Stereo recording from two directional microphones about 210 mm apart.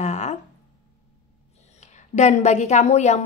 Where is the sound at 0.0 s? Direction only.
35° left (ahead or behind).